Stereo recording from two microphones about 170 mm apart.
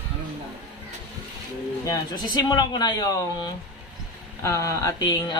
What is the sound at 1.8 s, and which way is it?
Speech, 20° left (ahead or behind).